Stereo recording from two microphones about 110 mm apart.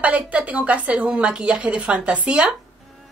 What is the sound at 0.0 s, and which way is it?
Speech, 10° right (ahead or behind).